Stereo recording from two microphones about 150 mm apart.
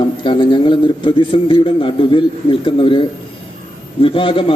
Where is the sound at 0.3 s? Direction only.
35° left (ahead or behind).